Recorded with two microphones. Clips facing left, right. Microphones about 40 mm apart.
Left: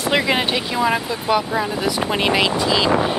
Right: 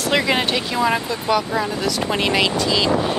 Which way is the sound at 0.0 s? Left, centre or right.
Centre.